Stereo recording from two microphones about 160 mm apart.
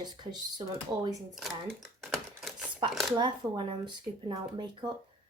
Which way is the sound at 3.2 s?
30° right (ahead or behind).